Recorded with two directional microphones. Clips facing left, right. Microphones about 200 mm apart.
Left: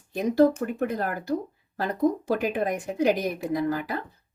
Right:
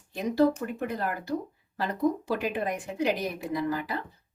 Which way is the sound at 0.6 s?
45° left (ahead or behind).